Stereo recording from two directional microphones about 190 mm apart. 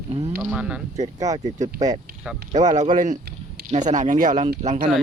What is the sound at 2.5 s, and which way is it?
Speech, 40° right (ahead or behind).